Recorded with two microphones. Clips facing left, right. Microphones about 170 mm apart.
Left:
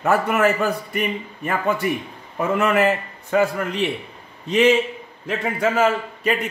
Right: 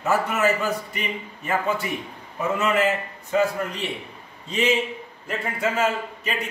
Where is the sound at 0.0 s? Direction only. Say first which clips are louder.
Left 4 dB; 55° left (ahead or behind).